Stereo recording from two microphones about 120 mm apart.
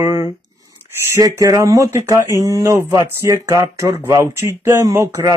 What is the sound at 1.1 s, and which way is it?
Speech, 25° right (ahead or behind).